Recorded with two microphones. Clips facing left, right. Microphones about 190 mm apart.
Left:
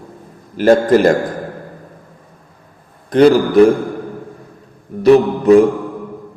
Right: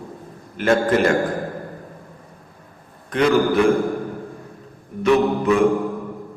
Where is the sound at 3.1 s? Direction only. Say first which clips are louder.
Left 7 dB; 35° left (ahead or behind).